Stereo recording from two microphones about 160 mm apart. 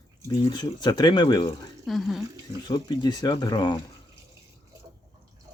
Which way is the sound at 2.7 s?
25° left (ahead or behind).